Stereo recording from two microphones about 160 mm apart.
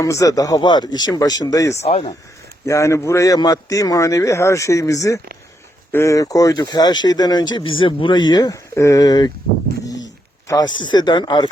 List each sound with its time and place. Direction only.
0.0 s speech: 20° left (ahead or behind)
1.8 s speech: 40° left (ahead or behind)
2.6 s speech: 20° left (ahead or behind)
10.5 s speech: 25° left (ahead or behind)